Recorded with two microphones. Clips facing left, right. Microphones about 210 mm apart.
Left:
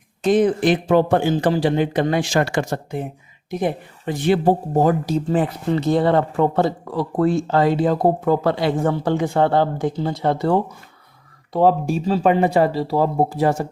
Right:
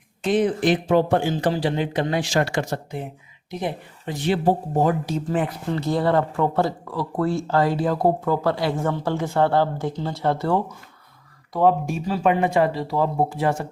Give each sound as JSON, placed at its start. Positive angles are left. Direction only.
{"t": 0.2, "sound": "speech", "side_deg": 45}
{"t": 4.3, "sound": "speech", "side_deg": 45}
{"t": 5.7, "sound": "speech", "side_deg": 20}
{"t": 11.5, "sound": "speech", "side_deg": 30}